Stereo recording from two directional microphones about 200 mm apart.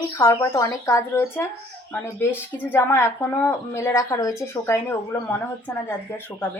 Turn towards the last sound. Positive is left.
turn(degrees=10)  # may be behind; listen again after turning